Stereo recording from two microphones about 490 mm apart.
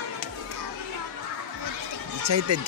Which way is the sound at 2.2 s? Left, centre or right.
Right.